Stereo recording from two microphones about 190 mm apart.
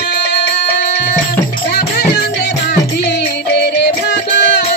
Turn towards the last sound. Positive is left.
turn(degrees=65)  # may be behind; listen again after turning